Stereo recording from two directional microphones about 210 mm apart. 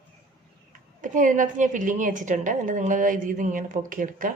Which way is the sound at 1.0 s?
40° right (ahead or behind).